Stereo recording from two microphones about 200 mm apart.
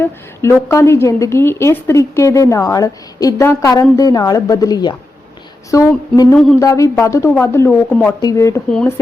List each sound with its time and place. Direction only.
0.0 s a woman's voice: 15° left (ahead or behind)